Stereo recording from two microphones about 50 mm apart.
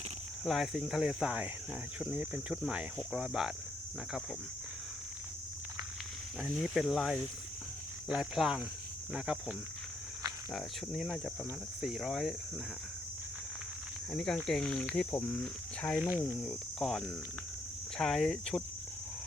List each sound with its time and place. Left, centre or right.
0.4 s speech: centre
2.6 s speech: centre
6.4 s speech: centre
8.4 s speech: centre
9.1 s speech: right
10.5 s speech: centre
14.1 s speech: centre
15.3 s speech: left
16.0 s speech: right
16.4 s speech: centre